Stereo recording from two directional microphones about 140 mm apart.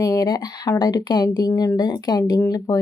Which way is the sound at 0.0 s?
25° left (ahead or behind).